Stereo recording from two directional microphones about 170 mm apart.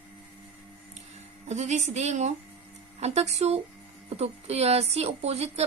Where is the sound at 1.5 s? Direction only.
40° right (ahead or behind).